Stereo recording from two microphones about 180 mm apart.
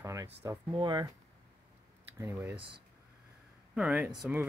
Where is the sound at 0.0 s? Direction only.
20° right (ahead or behind).